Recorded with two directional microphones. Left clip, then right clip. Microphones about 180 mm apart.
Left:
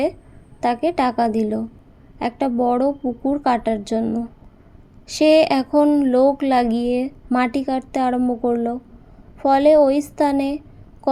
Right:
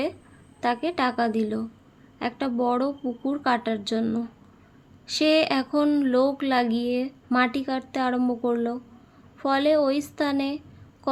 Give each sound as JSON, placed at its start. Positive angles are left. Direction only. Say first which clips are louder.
{"t": 0.6, "sound": "a woman's voice", "louder": "left 6 dB", "side_deg": 20}